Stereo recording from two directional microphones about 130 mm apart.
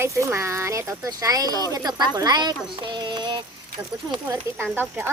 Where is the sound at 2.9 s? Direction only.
35° right (ahead or behind).